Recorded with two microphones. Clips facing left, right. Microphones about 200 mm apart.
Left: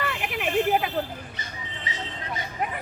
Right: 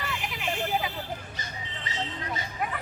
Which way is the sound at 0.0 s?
60° left (ahead or behind).